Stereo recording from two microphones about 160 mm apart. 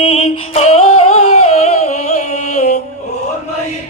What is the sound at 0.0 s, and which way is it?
Music, 40° left (ahead or behind).